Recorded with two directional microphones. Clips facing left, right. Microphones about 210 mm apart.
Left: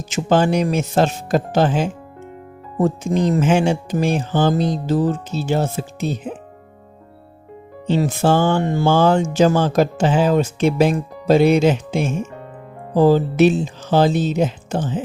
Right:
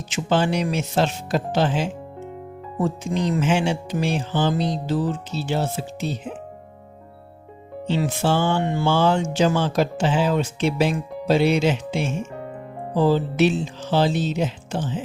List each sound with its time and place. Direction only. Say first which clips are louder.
0.0 s music: left 5 dB; 45° left (ahead or behind)
7.9 s music: left 5 dB; 45° left (ahead or behind)